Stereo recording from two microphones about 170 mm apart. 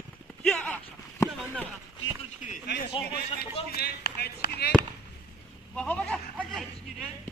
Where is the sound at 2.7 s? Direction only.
80° left.